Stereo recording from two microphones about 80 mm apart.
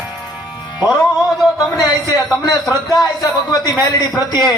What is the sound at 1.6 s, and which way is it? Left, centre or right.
Speech, left.